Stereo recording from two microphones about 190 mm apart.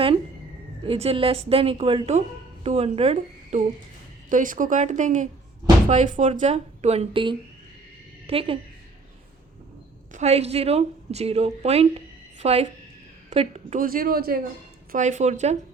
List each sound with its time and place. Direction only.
0.9 s a woman's voice: 30° right (ahead or behind)
10.1 s a woman's voice: 35° right (ahead or behind); by 14.4 s 50° right (ahead or behind)
14.9 s speech: 40° right (ahead or behind)